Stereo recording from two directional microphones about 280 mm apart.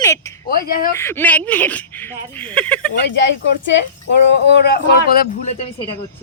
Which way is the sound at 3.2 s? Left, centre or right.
Left.